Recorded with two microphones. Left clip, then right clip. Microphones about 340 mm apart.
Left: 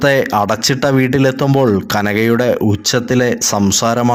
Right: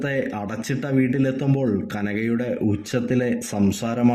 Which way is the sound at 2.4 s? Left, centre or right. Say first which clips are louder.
Left 11 dB; left.